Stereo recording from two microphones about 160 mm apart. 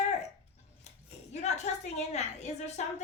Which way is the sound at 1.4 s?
45° left (ahead or behind).